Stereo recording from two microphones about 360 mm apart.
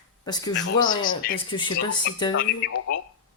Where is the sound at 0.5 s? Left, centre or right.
Left.